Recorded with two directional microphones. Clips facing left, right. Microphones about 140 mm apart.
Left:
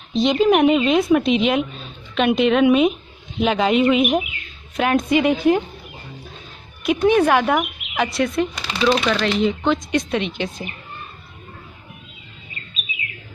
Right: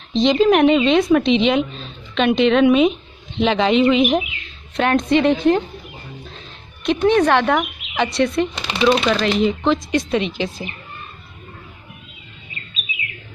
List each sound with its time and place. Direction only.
0.1 s a woman's voice: 5° left (ahead or behind)
6.9 s speech: 10° left (ahead or behind)
8.5 s speech: 20° right (ahead or behind)
9.4 s speech: centre (ahead or behind)